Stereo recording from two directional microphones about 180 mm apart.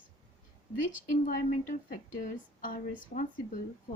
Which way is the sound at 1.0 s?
45° left (ahead or behind).